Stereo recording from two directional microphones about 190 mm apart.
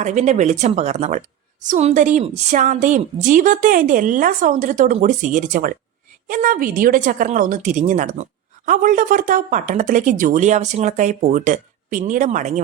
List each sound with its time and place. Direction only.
0.0 s speech: 40° right (ahead or behind)